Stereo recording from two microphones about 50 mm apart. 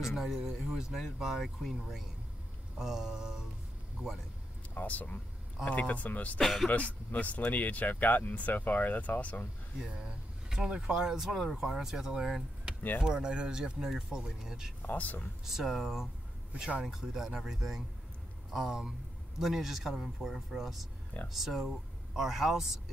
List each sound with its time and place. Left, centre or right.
0.0 s speech: centre
4.7 s speech: left
6.4 s speech: centre
6.7 s speech: left
10.5 s speech: centre
14.8 s speech: left
15.4 s speech: centre